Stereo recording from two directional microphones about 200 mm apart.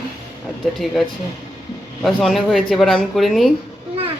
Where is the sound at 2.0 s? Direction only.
Centre (ahead or behind).